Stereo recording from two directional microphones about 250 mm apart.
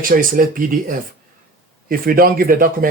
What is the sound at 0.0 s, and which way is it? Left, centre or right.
Speech, right.